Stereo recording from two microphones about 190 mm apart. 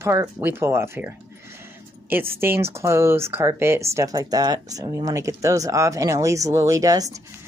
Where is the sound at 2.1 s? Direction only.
10° right (ahead or behind).